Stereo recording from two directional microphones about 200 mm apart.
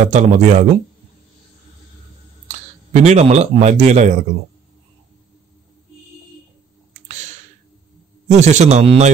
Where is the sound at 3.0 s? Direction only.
35° right (ahead or behind).